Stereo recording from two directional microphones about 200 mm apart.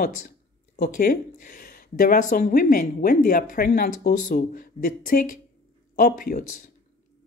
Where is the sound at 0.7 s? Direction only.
50° left (ahead or behind).